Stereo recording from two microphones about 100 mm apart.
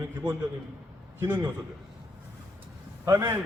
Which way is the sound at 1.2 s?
25° right (ahead or behind).